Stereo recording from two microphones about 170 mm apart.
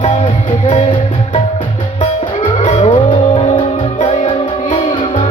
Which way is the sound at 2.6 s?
40° left (ahead or behind).